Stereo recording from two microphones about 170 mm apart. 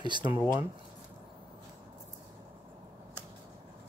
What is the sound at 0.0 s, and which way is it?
Speech, 25° right (ahead or behind).